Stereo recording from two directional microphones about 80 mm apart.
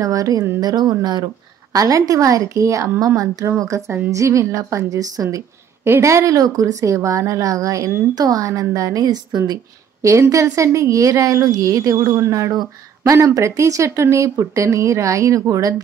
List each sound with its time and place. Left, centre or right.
0.0 s a woman's voice: right
0.6 s speech: right
1.7 s a woman's voice: right
10.0 s speech: right